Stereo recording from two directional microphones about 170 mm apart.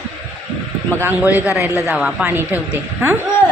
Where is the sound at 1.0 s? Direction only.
10° right (ahead or behind).